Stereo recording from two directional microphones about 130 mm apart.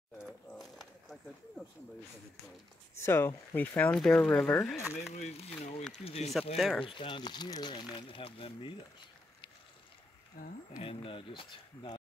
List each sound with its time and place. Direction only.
0.6 s a sound: centre (ahead or behind)
3.0 s speech: 20° left (ahead or behind)
5.1 s speech: 60° left (ahead or behind)
6.5 s speech: centre (ahead or behind)
6.8 s speech: 40° left (ahead or behind)
10.4 s speech: 90° left
10.8 s speech: 45° left (ahead or behind)